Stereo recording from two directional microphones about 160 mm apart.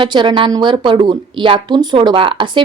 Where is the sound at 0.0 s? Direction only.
30° right (ahead or behind).